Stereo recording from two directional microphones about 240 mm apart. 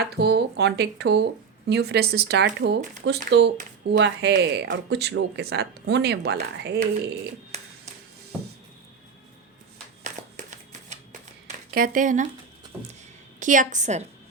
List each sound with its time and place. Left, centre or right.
0.0 s speech: right
10.0 s shuffling cards: right
11.4 s speech: right
13.4 s a woman's voice: right